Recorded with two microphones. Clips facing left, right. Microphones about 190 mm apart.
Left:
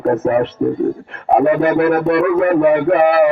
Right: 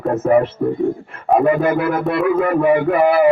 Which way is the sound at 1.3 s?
65° left (ahead or behind).